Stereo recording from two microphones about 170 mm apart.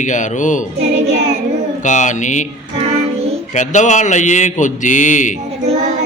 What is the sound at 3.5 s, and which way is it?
A man's voice, 45° left (ahead or behind).